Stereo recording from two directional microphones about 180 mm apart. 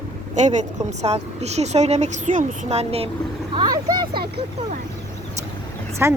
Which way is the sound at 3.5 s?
20° right (ahead or behind).